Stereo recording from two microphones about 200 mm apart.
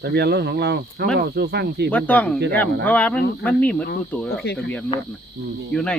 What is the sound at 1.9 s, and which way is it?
Speech, 5° left (ahead or behind).